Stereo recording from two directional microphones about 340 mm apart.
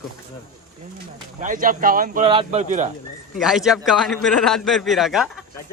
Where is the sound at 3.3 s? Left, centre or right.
Centre.